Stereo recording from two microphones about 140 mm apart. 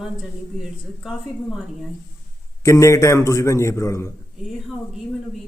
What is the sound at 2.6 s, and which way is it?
A man's voice, 20° left (ahead or behind).